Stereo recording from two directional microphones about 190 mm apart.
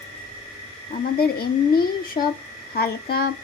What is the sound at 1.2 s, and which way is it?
Speech, 55° left (ahead or behind).